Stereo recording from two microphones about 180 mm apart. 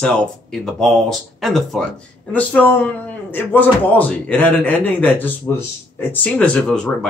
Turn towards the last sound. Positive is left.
turn(degrees=5)  # may be behind; listen again after turning